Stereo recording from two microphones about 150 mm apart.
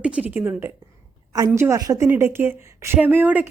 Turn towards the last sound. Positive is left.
turn(degrees=-10)  # may be behind; listen again after turning